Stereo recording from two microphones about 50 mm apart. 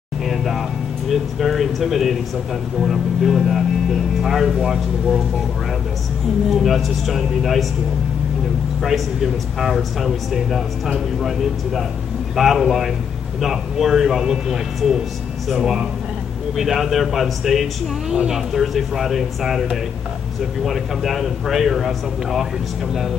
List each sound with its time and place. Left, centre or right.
0.2 s speech: centre
6.5 s speech: centre
8.8 s speech: centre
12.4 s speech: centre
18.1 s speech: centre
18.5 s speech: centre
20.6 s speech: centre